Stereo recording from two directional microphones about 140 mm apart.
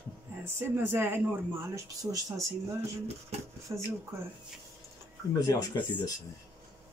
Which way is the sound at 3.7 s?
25° right (ahead or behind).